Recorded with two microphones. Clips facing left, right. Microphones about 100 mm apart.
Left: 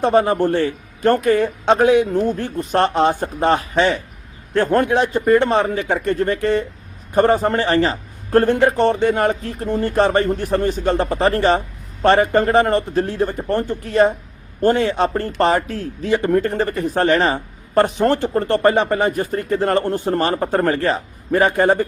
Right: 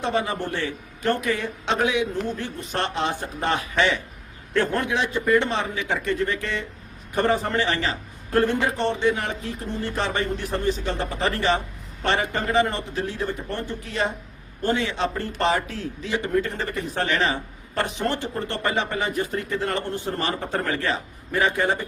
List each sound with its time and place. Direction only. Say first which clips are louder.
0.0 s speech: left 10 dB; 45° left (ahead or behind)